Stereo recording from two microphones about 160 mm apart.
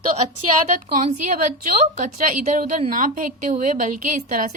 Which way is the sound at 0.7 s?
55° right (ahead or behind).